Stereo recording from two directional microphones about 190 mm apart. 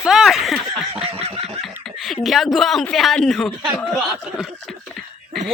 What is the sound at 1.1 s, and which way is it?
Snicker, 30° right (ahead or behind).